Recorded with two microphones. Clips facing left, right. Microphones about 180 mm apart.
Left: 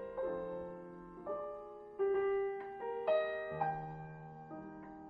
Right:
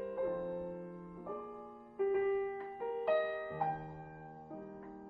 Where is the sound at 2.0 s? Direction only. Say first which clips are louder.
Even; 10° right (ahead or behind).